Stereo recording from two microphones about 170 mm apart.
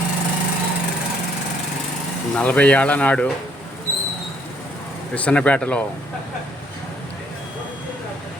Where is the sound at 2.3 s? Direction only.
5° left (ahead or behind).